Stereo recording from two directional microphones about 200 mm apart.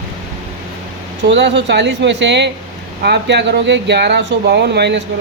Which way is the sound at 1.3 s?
60° right (ahead or behind).